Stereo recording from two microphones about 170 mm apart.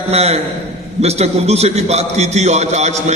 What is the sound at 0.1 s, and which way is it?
A man's voice, 35° right (ahead or behind).